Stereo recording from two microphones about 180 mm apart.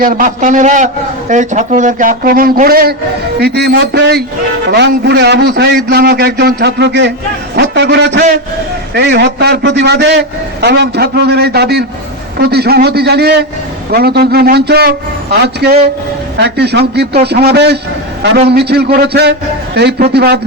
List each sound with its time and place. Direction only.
0.0 s a man's voice: 45° right (ahead or behind)